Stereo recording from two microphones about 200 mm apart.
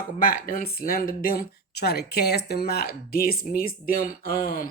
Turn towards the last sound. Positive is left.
turn(degrees=45)  # may be behind; listen again after turning